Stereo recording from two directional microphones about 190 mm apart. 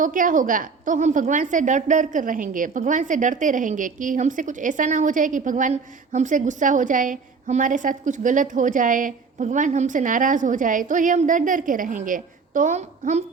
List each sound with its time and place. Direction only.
0.0 s a woman's voice: 45° right (ahead or behind)